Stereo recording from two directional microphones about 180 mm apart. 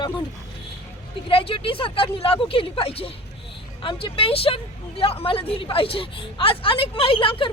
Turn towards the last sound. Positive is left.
turn(degrees=30)  # may be behind; listen again after turning